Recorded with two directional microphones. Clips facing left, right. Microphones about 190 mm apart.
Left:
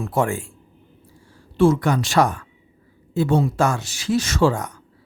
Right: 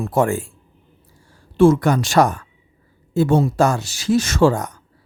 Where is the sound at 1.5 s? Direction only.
50° right (ahead or behind).